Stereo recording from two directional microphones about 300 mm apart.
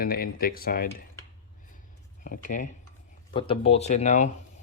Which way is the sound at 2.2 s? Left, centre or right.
Left.